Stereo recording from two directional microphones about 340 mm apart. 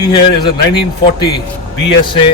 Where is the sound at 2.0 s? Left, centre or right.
Centre.